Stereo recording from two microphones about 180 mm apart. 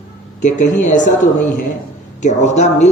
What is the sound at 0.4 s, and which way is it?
Speech, 45° left (ahead or behind).